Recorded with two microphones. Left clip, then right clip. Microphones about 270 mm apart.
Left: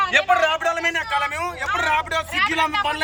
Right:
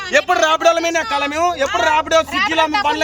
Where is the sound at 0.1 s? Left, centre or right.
Right.